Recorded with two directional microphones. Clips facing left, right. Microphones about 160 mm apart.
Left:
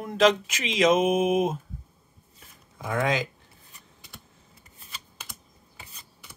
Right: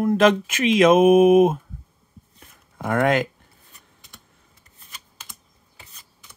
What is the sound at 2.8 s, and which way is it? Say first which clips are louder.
Speech: right 6 dB; 60° right (ahead or behind).